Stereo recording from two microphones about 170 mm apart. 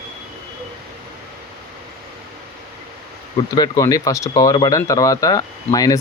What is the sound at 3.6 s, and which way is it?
Speech, 20° left (ahead or behind).